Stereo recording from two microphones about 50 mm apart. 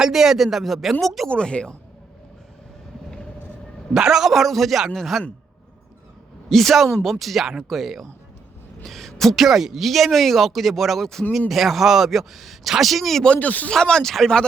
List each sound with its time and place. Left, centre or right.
0.0 s speech: centre
1.3 s speech: left
3.9 s speech: centre
6.5 s speech: centre
13.2 s speech: left
13.7 s speech: centre